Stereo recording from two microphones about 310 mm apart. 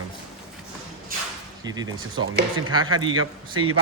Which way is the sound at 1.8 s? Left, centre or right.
Right.